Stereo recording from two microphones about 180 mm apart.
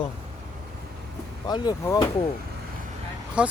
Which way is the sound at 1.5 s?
20° left (ahead or behind).